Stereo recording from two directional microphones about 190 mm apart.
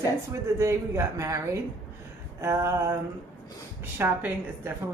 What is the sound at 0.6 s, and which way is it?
Speech, 15° right (ahead or behind).